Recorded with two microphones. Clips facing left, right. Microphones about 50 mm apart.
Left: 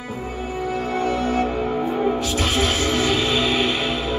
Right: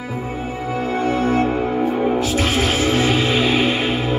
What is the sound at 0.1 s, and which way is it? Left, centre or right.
Music, right.